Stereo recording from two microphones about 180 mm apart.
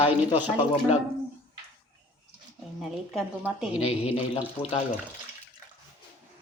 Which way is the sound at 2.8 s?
5° right (ahead or behind).